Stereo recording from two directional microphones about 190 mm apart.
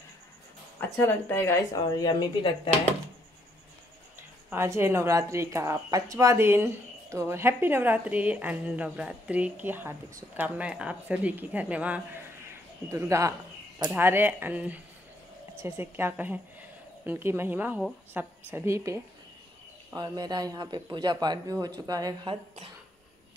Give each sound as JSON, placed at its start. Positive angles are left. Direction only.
{"t": 0.7, "sound": "speech", "side_deg": 10}
{"t": 4.5, "sound": "a woman's voice", "side_deg": -15}